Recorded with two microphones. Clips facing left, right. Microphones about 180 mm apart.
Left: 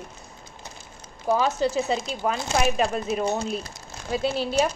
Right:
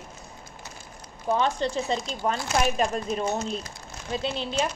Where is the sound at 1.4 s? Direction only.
5° left (ahead or behind).